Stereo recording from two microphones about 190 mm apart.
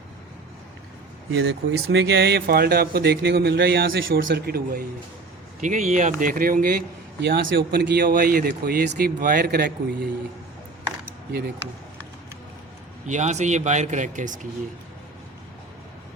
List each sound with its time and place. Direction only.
1.4 s a man's voice: 65° right (ahead or behind)
11.3 s speech: 55° right (ahead or behind)
13.1 s speech: 40° right (ahead or behind)